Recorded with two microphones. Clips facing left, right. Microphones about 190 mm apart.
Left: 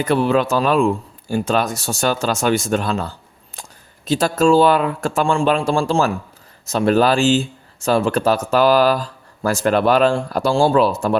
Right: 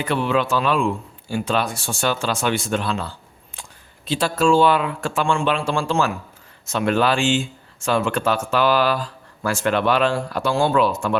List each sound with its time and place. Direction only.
0.0 s speech: 40° left (ahead or behind)